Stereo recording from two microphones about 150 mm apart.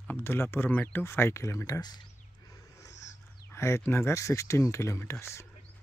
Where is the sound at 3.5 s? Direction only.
15° left (ahead or behind).